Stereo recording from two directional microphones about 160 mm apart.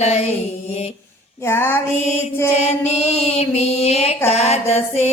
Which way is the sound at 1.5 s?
15° left (ahead or behind).